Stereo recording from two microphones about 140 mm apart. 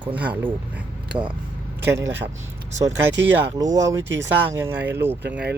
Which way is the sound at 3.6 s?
25° right (ahead or behind).